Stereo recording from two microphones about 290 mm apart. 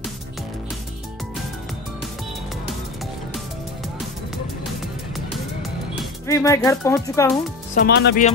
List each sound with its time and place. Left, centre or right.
6.2 s speech: centre
7.7 s speech: left